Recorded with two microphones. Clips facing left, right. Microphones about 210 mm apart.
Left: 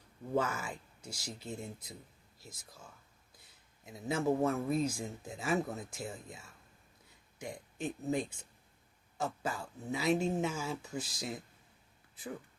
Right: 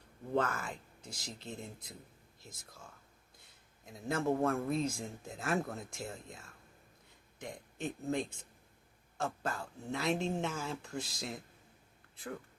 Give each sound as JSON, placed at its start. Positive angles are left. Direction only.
{"t": 0.3, "sound": "speech", "side_deg": 5}
{"t": 3.8, "sound": "speech", "side_deg": 5}
{"t": 7.4, "sound": "speech", "side_deg": 0}